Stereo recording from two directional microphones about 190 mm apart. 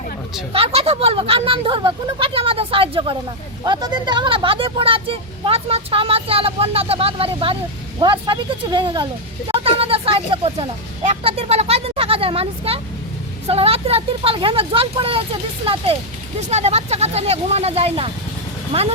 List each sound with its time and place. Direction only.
0.5 s speech: 30° right (ahead or behind)